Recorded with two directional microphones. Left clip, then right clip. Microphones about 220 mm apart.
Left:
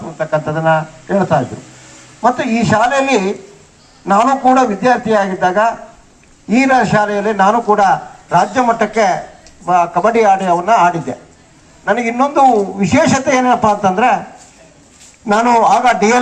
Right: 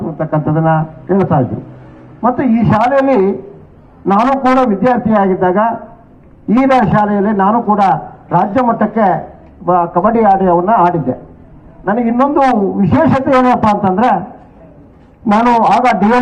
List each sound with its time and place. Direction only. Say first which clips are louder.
0.2 s a man's voice: even; 25° left (ahead or behind)
15.3 s a man's voice: even; 30° left (ahead or behind)